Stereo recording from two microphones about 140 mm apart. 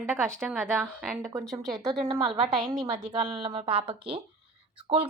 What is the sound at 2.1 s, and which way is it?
A woman's voice, 40° right (ahead or behind).